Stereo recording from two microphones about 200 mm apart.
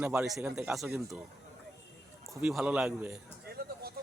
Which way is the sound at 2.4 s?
5° right (ahead or behind).